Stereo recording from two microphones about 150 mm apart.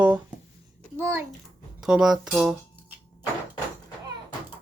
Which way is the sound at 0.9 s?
15° right (ahead or behind).